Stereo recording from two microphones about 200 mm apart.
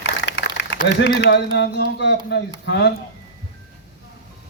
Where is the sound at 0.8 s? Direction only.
60° left (ahead or behind).